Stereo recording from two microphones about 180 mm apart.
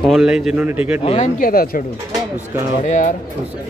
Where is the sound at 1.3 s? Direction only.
50° left (ahead or behind).